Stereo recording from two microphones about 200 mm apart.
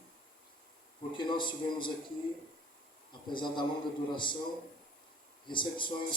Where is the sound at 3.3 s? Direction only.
25° left (ahead or behind).